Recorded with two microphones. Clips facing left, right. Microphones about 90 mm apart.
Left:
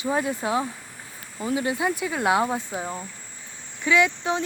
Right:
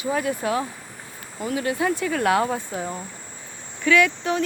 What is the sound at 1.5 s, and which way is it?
Speech, 20° left (ahead or behind).